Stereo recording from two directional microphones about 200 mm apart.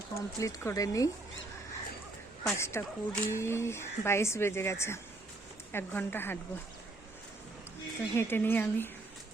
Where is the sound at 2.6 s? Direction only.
15° left (ahead or behind).